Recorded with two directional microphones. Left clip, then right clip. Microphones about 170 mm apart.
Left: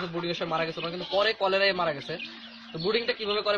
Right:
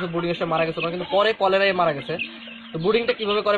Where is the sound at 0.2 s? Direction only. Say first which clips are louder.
Right 7 dB; 15° left (ahead or behind).